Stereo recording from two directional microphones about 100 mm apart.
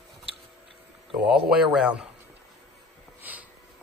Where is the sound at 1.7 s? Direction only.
10° right (ahead or behind).